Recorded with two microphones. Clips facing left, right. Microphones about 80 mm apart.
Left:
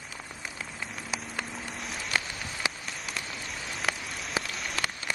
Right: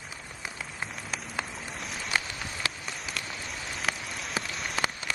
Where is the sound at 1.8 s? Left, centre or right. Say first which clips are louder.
Right 2 dB; centre.